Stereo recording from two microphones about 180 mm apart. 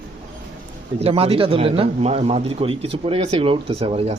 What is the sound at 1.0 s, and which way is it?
A man's voice, 30° right (ahead or behind).